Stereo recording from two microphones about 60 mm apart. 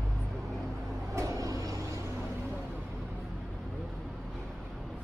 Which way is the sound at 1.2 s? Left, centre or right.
Right.